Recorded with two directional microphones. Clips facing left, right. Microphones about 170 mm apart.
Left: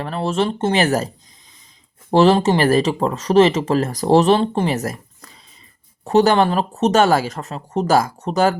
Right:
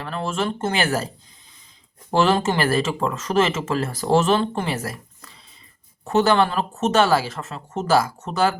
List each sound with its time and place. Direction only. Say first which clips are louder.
0.0 s speech: left 5 dB; 35° left (ahead or behind)